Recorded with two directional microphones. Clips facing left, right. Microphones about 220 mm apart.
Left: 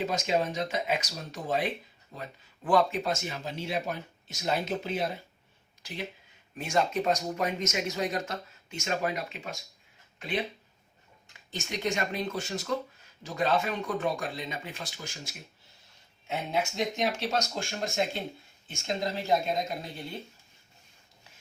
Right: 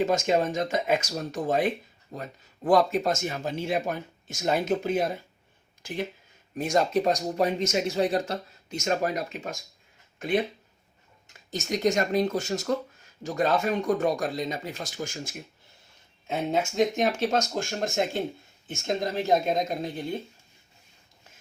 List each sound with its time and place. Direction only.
0.0 s speech: 50° right (ahead or behind)
6.6 s speech: 40° right (ahead or behind)
16.7 s speech: 50° right (ahead or behind)